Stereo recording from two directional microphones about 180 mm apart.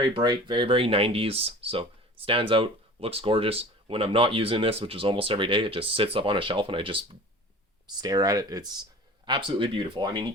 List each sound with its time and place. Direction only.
0.0 s speech: 25° right (ahead or behind)